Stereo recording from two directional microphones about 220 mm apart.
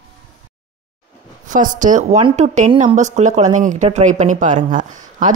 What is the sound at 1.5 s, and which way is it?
A woman's voice, 35° right (ahead or behind).